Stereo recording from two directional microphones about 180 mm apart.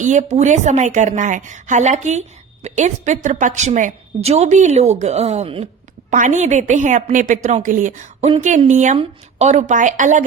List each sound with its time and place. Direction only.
0.0 s a woman's voice: 45° right (ahead or behind)